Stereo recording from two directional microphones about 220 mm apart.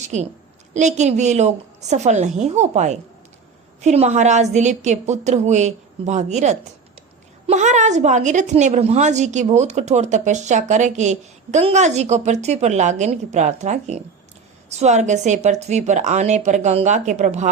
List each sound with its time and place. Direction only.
0.1 s a woman's voice: 30° right (ahead or behind)